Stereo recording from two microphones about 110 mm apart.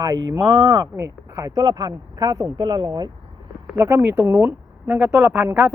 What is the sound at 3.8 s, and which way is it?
Speech, 25° right (ahead or behind).